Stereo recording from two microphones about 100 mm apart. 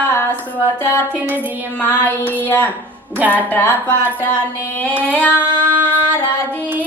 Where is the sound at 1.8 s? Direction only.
20° left (ahead or behind).